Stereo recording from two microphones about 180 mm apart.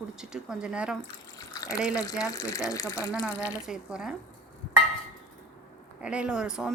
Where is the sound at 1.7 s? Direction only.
5° right (ahead or behind).